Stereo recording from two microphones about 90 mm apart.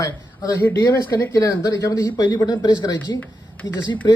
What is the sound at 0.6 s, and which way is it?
Speech, 25° left (ahead or behind).